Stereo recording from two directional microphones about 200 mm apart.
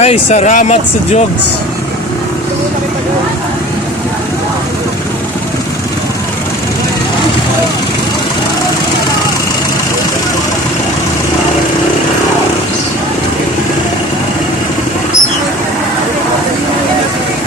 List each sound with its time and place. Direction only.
0.0 s speech: 30° left (ahead or behind)